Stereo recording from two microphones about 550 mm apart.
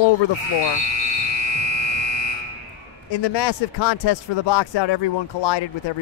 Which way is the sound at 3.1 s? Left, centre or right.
Left.